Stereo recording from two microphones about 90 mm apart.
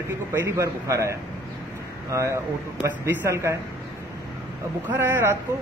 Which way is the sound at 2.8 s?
20° right (ahead or behind).